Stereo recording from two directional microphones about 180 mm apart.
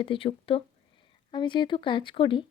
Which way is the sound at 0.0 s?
30° left (ahead or behind).